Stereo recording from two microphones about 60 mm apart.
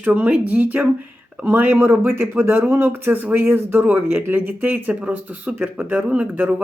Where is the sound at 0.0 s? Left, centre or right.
Right.